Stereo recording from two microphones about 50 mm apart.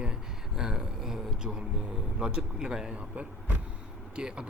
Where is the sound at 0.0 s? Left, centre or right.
Centre.